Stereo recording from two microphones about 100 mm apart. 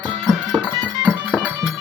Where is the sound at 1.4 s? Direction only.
15° right (ahead or behind).